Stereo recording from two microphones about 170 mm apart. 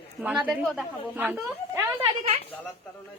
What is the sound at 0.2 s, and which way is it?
A woman's voice, 10° right (ahead or behind).